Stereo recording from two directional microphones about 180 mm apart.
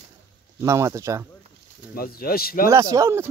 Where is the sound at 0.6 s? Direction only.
15° right (ahead or behind).